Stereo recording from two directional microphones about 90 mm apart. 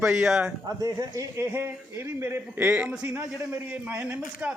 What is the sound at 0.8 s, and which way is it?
A man's voice, 40° right (ahead or behind).